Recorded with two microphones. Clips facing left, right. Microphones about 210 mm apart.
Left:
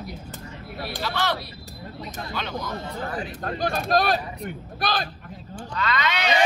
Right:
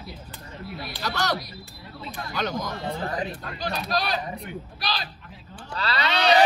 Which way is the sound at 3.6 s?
50° left (ahead or behind).